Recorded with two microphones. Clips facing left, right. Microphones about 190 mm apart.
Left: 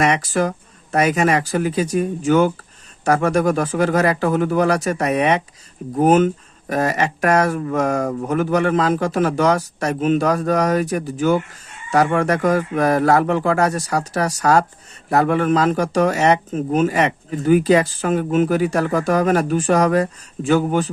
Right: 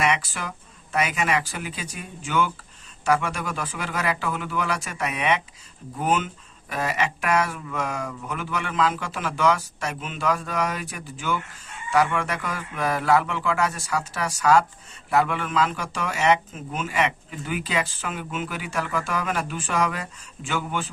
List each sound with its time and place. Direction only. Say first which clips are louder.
0.0 s speech: left 8 dB; 40° left (ahead or behind)